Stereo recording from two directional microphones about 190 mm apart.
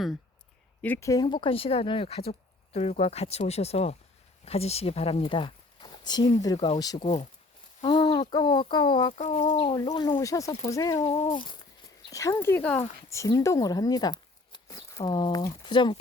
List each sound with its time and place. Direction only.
0.8 s speech: 10° left (ahead or behind)
7.0 s speech: 35° left (ahead or behind)
7.9 s speech: 25° left (ahead or behind)
9.6 s speech: 25° left (ahead or behind)
11.1 s speech: 30° left (ahead or behind)